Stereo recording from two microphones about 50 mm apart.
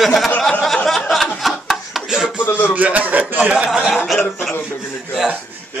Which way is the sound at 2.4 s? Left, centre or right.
Left.